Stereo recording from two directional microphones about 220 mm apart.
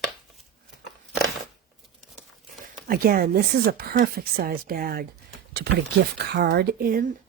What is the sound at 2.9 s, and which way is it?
Speech, 40° right (ahead or behind).